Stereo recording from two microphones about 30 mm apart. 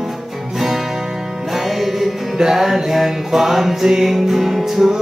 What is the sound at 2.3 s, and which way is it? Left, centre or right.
Music, centre.